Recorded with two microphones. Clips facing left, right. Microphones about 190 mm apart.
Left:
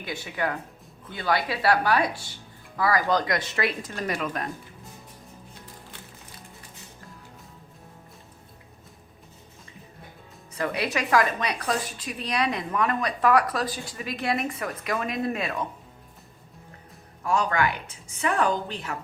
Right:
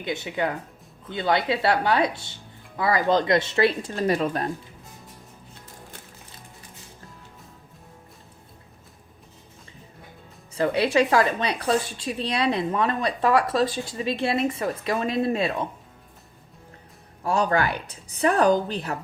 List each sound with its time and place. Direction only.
0.0 s speech: 20° right (ahead or behind)
10.5 s speech: 30° right (ahead or behind)
17.2 s a woman's voice: 35° right (ahead or behind)